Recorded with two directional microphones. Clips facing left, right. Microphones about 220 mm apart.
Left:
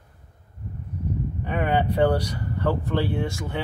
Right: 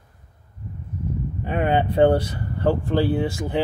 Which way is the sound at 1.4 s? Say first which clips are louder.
Right 3 dB; 25° right (ahead or behind).